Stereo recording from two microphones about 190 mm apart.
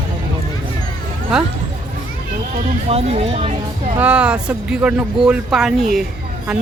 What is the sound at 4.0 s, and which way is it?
Speech, 5° right (ahead or behind).